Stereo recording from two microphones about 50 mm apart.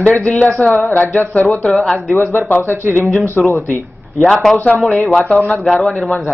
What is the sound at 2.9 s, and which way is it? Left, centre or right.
Speech, left.